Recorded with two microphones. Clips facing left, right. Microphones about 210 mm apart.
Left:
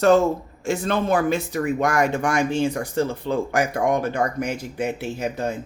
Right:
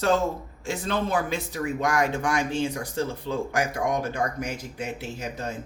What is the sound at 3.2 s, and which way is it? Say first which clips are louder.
Speech: left 5 dB; 60° left (ahead or behind).